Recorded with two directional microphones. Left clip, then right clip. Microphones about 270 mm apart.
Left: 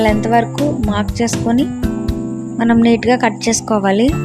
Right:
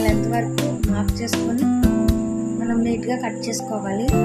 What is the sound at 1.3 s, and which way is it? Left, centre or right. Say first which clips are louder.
Speech: left 4 dB; centre.